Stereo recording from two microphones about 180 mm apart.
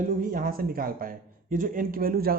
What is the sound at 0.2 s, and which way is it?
A man's voice, 50° right (ahead or behind).